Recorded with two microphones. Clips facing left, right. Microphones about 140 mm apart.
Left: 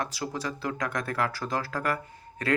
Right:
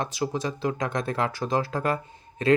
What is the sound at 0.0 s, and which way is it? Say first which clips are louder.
Speech: right 4 dB; 20° right (ahead or behind).